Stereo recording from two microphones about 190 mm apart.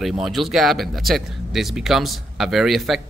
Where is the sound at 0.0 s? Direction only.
Centre (ahead or behind).